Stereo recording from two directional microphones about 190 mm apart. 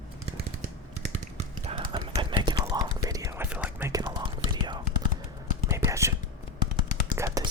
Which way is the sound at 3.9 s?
20° right (ahead or behind).